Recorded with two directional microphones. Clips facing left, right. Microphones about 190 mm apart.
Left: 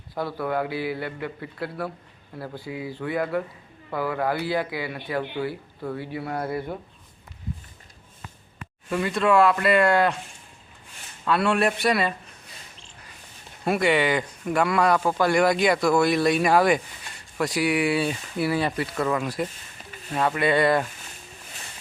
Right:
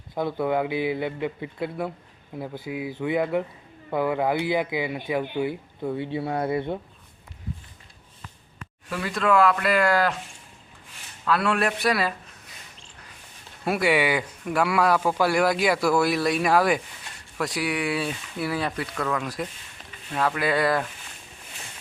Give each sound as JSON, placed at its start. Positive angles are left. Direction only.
{"t": 0.1, "sound": "a man's voice", "side_deg": -20}
{"t": 2.4, "sound": "speech", "side_deg": -10}
{"t": 2.9, "sound": "a man's voice", "side_deg": -20}
{"t": 8.9, "sound": "speech", "side_deg": 0}
{"t": 11.3, "sound": "speech", "side_deg": 0}
{"t": 13.7, "sound": "speech", "side_deg": -5}